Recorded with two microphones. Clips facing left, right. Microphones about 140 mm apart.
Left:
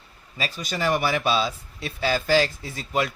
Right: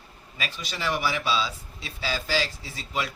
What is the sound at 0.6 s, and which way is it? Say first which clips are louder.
Speech: left 5 dB; 45° left (ahead or behind).